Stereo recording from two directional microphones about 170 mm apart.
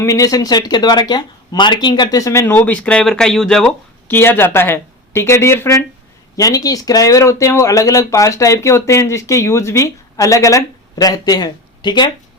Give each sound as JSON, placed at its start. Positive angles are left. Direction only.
{"t": 0.0, "sound": "speech", "side_deg": 20}